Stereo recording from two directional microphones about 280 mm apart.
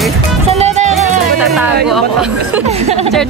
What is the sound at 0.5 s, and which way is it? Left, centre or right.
Music, right.